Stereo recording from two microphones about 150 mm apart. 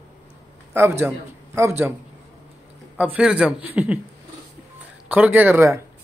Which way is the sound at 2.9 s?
10° right (ahead or behind).